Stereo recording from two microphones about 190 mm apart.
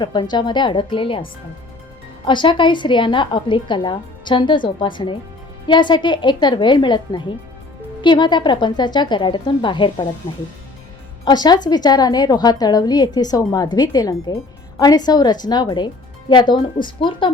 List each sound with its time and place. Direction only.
0.0 s a woman's voice: 25° left (ahead or behind)
2.2 s a woman's voice: 25° left (ahead or behind)
11.3 s a woman's voice: 20° left (ahead or behind)